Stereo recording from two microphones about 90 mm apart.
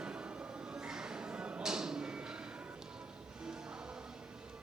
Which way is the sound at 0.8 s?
10° right (ahead or behind).